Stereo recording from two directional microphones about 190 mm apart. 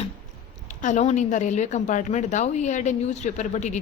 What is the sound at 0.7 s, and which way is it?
A woman's voice, 40° left (ahead or behind).